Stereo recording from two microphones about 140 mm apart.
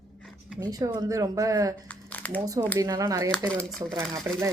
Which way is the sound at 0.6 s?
30° right (ahead or behind).